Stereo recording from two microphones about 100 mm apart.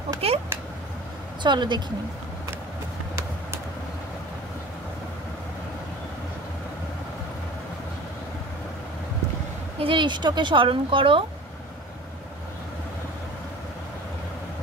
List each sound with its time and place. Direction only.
0.2 s speech: 75° right (ahead or behind)
1.4 s speech: 50° right (ahead or behind)
9.8 s speech: 55° right (ahead or behind)